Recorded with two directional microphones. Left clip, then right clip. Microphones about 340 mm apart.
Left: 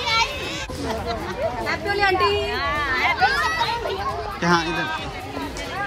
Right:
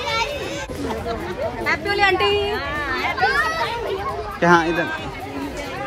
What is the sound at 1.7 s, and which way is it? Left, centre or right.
Speech, centre.